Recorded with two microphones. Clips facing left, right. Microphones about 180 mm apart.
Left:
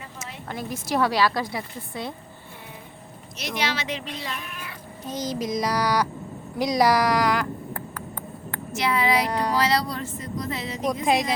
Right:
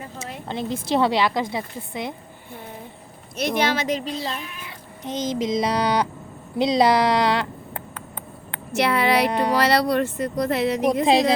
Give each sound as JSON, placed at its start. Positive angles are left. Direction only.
{"t": 0.4, "sound": "a woman's voice", "side_deg": -25}
{"t": 3.3, "sound": "a child's voice", "side_deg": -55}
{"t": 5.0, "sound": "a woman's voice", "side_deg": -20}
{"t": 8.7, "sound": "speech", "side_deg": -65}